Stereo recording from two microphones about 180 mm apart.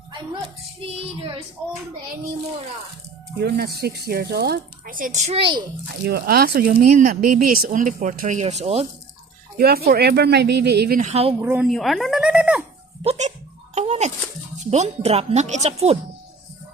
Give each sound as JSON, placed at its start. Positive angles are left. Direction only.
{"t": 0.8, "sound": "speech", "side_deg": -30}
{"t": 3.3, "sound": "speech", "side_deg": -60}
{"t": 5.9, "sound": "speech", "side_deg": -60}
{"t": 9.6, "sound": "speech", "side_deg": -60}
{"t": 11.0, "sound": "speech", "side_deg": -35}
{"t": 11.3, "sound": "speech", "side_deg": -10}
{"t": 13.0, "sound": "speech", "side_deg": -35}
{"t": 13.7, "sound": "music", "side_deg": -35}
{"t": 14.6, "sound": "speech", "side_deg": -40}